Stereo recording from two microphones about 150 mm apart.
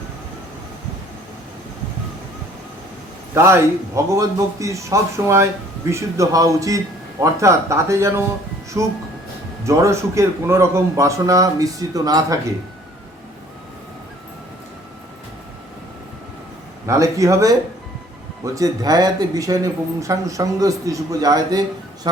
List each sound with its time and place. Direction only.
3.3 s speech: 15° right (ahead or behind)
16.8 s speech: 20° right (ahead or behind)